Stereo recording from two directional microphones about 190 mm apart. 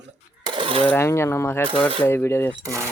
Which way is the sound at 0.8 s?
10° left (ahead or behind).